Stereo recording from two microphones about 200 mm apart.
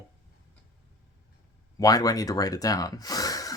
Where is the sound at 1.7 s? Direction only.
20° left (ahead or behind).